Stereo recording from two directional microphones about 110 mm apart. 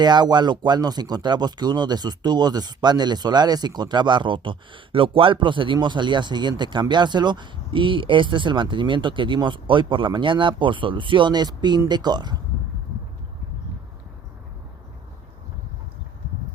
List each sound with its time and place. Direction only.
0.0 s speech: 40° right (ahead or behind)